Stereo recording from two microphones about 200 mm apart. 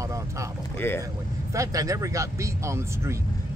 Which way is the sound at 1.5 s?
15° right (ahead or behind).